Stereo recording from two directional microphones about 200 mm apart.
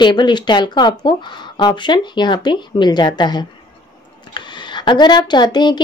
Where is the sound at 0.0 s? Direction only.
20° left (ahead or behind).